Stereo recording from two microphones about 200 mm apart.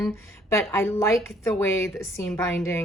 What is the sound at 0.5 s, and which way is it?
A woman's voice, 10° left (ahead or behind).